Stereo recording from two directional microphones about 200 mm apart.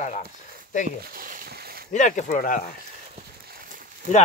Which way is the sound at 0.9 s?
45° right (ahead or behind).